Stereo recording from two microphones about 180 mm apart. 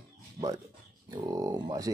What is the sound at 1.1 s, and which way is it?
Speech, 20° right (ahead or behind).